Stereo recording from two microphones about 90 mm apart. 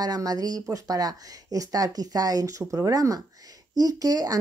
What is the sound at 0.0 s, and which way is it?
Speech, 45° right (ahead or behind).